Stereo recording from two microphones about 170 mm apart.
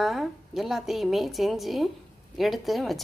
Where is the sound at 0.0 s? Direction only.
Centre (ahead or behind).